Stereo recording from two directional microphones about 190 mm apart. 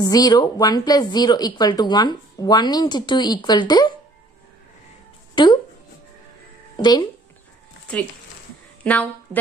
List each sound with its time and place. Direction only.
0.0 s speech: 20° left (ahead or behind)
5.3 s speech: 25° left (ahead or behind)
6.8 s speech: 20° left (ahead or behind)
8.8 s a woman's voice: 10° left (ahead or behind)